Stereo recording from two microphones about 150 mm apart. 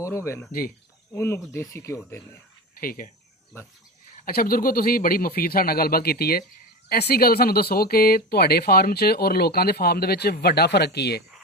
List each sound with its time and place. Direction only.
0.0 s speech: 20° left (ahead or behind)
2.8 s speech: 70° left (ahead or behind)
4.3 s speech: 80° left